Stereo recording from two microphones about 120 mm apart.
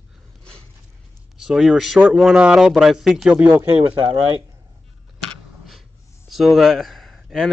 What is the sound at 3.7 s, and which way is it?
Speech, 45° right (ahead or behind).